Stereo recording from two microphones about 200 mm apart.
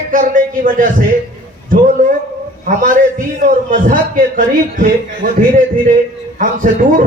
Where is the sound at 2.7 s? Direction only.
45° right (ahead or behind).